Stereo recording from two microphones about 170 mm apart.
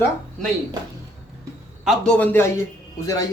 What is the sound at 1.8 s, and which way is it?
Speech, 5° left (ahead or behind).